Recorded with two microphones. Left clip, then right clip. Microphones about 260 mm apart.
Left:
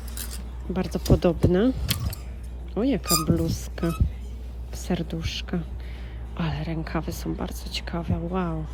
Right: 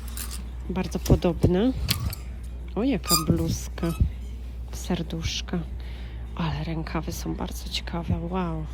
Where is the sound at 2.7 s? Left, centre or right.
Right.